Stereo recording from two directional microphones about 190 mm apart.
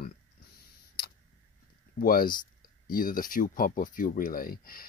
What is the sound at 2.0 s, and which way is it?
Speech, 50° left (ahead or behind).